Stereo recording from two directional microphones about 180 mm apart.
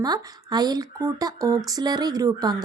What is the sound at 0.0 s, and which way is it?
Speech, 20° right (ahead or behind).